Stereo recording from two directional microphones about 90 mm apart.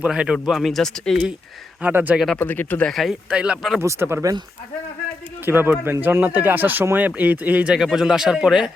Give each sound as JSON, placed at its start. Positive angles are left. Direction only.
{"t": 0.0, "sound": "speech", "side_deg": -10}
{"t": 1.8, "sound": "speech", "side_deg": -20}
{"t": 2.1, "sound": "speech", "side_deg": 0}
{"t": 2.4, "sound": "speech", "side_deg": 20}
{"t": 2.8, "sound": "speech", "side_deg": 0}
{"t": 3.2, "sound": "speech", "side_deg": -10}
{"t": 3.8, "sound": "speech", "side_deg": -30}
{"t": 5.5, "sound": "speech", "side_deg": -25}